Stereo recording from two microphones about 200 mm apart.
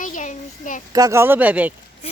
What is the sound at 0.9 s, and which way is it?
Speech, 15° right (ahead or behind).